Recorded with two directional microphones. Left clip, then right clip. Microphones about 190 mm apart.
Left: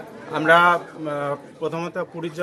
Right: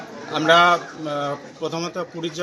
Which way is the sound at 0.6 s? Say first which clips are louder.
Right 1 dB; centre (ahead or behind).